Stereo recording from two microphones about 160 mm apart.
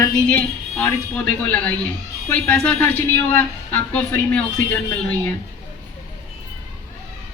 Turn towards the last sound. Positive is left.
turn(degrees=10)  # may be behind; listen again after turning